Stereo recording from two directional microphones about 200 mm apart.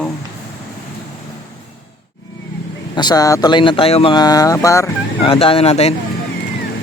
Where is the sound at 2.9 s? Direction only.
20° left (ahead or behind).